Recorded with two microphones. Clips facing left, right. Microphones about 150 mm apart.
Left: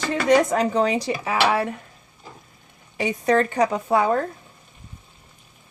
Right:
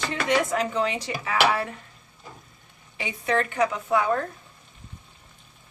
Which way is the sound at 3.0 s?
45° left (ahead or behind).